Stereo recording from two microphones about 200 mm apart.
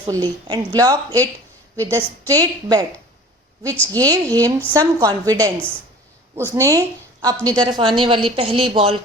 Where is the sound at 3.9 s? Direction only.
20° right (ahead or behind).